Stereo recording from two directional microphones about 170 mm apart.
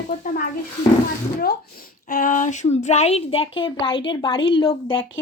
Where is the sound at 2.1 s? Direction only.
55° left (ahead or behind); by 5.1 s 30° left (ahead or behind).